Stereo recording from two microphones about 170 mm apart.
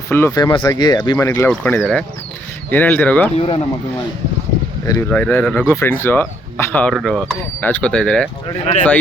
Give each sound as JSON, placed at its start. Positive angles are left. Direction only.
{"t": 0.1, "sound": "speech", "side_deg": 15}
{"t": 1.5, "sound": "speech", "side_deg": 5}
{"t": 3.3, "sound": "speech", "side_deg": 35}
{"t": 4.9, "sound": "speech", "side_deg": 15}
{"t": 6.9, "sound": "speech", "side_deg": 0}